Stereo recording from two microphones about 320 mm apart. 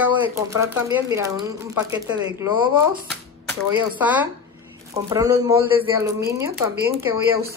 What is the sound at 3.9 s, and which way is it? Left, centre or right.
Speech, centre.